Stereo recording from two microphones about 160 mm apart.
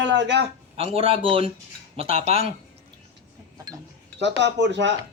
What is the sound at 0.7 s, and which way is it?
Speech, 35° right (ahead or behind).